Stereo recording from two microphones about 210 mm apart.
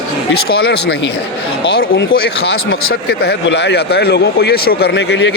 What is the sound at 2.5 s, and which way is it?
Speech, 75° left (ahead or behind).